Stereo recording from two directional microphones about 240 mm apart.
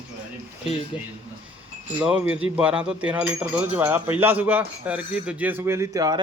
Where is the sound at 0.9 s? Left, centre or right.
Centre.